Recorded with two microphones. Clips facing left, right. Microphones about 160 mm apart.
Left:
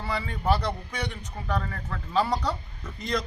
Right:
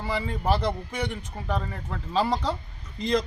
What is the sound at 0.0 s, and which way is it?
Speech, 20° right (ahead or behind).